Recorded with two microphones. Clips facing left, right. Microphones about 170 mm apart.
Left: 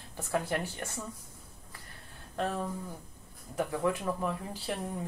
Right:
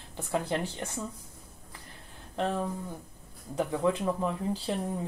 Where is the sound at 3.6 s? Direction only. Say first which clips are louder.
Right 3 dB; 25° right (ahead or behind).